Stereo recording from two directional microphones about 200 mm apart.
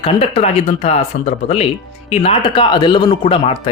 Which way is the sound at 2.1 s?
30° left (ahead or behind).